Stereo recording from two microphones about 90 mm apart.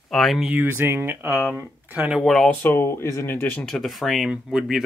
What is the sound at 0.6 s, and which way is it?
Speech, 25° right (ahead or behind).